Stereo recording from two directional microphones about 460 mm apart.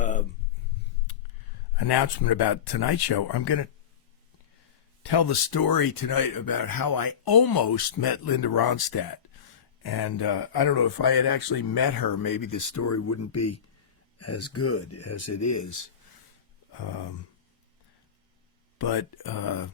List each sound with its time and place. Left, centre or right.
0.0 s a sound: centre
1.7 s speech: left
5.0 s speech: left
16.7 s speech: left
18.8 s speech: left